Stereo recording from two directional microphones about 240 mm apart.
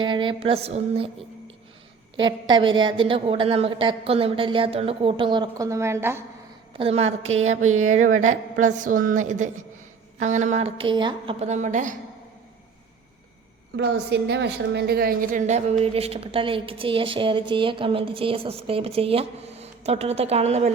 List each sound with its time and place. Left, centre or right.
0.0 s speech: centre
2.1 s speech: centre
6.7 s speech: right
7.6 s a sound: right
8.1 s a woman's voice: right
13.7 s a woman's voice: right